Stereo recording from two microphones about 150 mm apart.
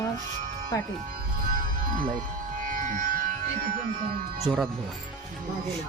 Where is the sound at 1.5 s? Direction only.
65° right (ahead or behind).